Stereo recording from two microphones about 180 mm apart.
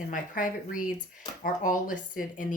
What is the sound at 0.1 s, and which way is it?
Speech, 50° left (ahead or behind).